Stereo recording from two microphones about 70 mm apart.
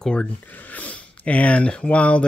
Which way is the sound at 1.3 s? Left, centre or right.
Centre.